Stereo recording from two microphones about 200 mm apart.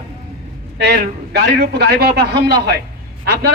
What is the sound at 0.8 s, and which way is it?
A man's voice, 55° right (ahead or behind).